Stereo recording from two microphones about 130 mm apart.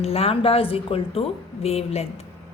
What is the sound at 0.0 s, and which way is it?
A woman's voice, 50° left (ahead or behind).